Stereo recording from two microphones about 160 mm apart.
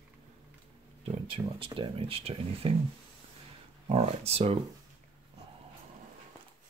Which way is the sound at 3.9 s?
40° right (ahead or behind).